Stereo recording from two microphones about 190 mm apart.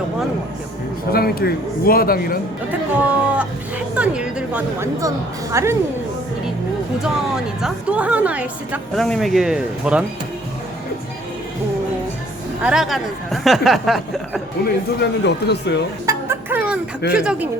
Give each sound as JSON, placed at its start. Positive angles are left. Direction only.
{"t": 1.1, "sound": "a man's voice", "side_deg": 55}
{"t": 3.0, "sound": "speech", "side_deg": -5}
{"t": 7.0, "sound": "a woman's voice", "side_deg": -5}
{"t": 12.6, "sound": "speech", "side_deg": 0}
{"t": 15.2, "sound": "speech", "side_deg": 65}
{"t": 16.0, "sound": "a sound", "side_deg": -10}
{"t": 17.1, "sound": "speech", "side_deg": -5}